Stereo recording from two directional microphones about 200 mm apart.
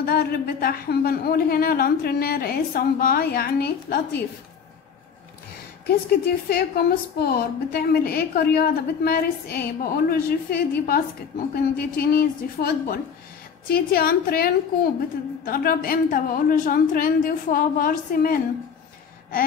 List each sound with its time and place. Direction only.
0.0 s a woman's voice: 50° left (ahead or behind)
5.9 s a woman's voice: 50° left (ahead or behind)